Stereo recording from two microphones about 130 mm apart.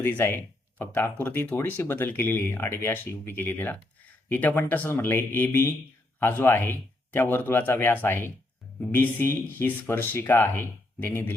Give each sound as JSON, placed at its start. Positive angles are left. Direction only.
{"t": 0.0, "sound": "speech", "side_deg": 15}